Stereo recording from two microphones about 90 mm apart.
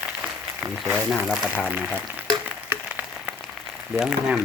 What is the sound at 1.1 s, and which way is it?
Speech, 5° right (ahead or behind).